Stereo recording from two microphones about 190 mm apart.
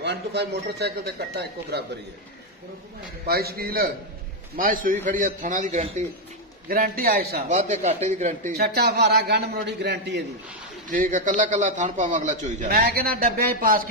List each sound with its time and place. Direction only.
0.0 s speech: 65° right (ahead or behind)
3.3 s a man's voice: 55° right (ahead or behind)
6.7 s a man's voice: 50° right (ahead or behind)
7.4 s speech: 40° right (ahead or behind)
8.5 s speech: 55° right (ahead or behind)
10.9 s a man's voice: 45° right (ahead or behind)